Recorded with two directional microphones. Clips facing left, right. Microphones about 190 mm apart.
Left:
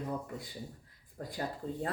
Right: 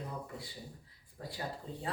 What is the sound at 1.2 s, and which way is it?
Speech, 50° left (ahead or behind).